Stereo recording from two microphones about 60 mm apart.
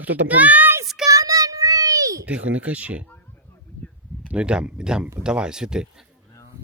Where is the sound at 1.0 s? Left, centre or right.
Right.